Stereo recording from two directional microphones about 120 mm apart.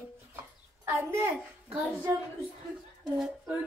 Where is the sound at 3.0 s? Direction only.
5° right (ahead or behind).